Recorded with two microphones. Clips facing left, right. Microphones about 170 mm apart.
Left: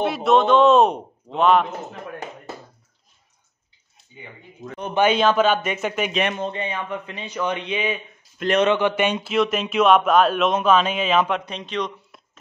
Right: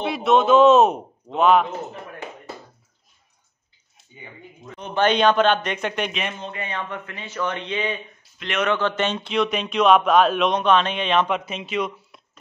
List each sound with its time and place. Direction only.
0.0 s speech: centre (ahead or behind)
4.9 s speech: 5° left (ahead or behind)
6.2 s a man's voice: 65° left (ahead or behind)
6.7 s speech: 15° left (ahead or behind)
8.4 s a man's voice: 40° left (ahead or behind)
8.6 s speech: 15° left (ahead or behind); by 12.2 s 5° right (ahead or behind)